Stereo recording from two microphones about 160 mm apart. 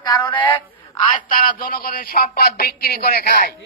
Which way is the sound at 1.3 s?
55° left (ahead or behind).